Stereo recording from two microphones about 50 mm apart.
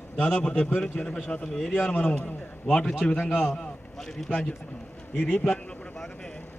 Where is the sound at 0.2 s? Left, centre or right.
Centre.